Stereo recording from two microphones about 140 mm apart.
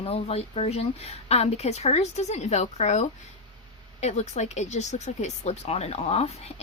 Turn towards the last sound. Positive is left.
turn(degrees=50)  # may be behind; listen again after turning